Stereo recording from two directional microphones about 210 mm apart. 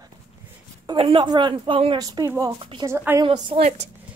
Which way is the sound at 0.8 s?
25° right (ahead or behind).